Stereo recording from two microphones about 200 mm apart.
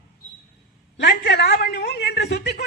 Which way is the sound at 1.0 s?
55° left (ahead or behind).